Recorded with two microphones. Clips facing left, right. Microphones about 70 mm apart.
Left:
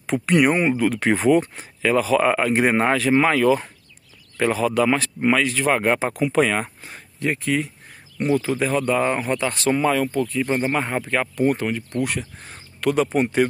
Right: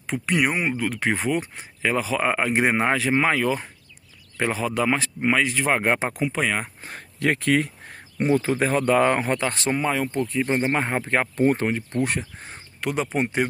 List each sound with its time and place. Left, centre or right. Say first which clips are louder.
0.0 s speech: left 5 dB; centre
1.8 s speech: left 5 dB; centre
6.3 s speech: left 5 dB; centre
6.8 s speech: right 2 dB; right
7.2 s speech: right 2 dB; right
8.3 s speech: even; right
9.8 s speech: left 4 dB; centre